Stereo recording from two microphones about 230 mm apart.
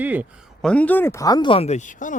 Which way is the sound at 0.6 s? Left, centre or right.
Centre.